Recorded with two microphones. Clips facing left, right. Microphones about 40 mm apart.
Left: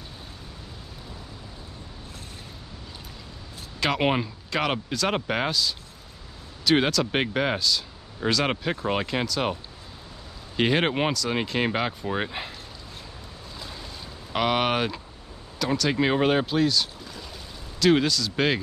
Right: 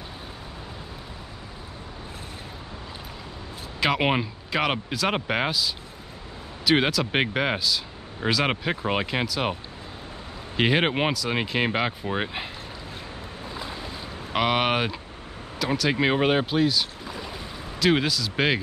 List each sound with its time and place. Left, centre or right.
3.8 s speech: centre
14.3 s speech: centre
17.0 s boat: right
17.7 s speech: centre